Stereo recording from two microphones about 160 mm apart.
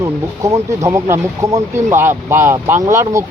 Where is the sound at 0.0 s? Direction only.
20° right (ahead or behind).